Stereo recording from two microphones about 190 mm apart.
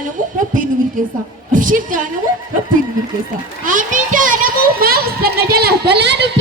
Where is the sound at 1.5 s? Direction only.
45° right (ahead or behind).